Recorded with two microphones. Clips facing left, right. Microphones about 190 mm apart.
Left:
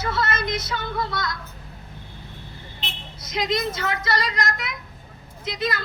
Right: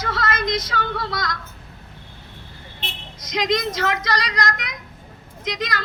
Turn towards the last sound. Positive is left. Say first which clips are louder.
# left 1 dB
turn(degrees=-90)